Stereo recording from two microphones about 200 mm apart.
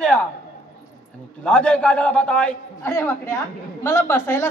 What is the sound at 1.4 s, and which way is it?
A man's voice, 5° left (ahead or behind).